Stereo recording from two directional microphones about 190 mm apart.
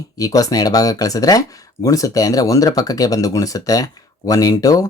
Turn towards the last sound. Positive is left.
turn(degrees=20)  # may be behind; listen again after turning